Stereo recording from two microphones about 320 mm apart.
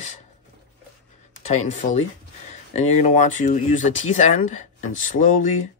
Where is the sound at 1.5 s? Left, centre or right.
Left.